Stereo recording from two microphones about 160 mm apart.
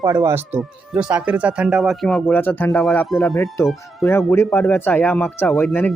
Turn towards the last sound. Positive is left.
turn(degrees=15)  # may be behind; listen again after turning